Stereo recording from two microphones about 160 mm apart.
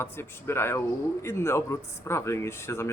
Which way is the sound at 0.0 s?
15° left (ahead or behind).